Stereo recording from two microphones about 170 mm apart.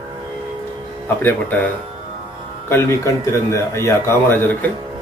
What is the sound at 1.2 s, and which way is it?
Speech, 10° left (ahead or behind).